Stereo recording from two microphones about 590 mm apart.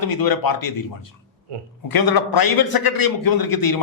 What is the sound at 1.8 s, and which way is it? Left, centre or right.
A man's voice, left.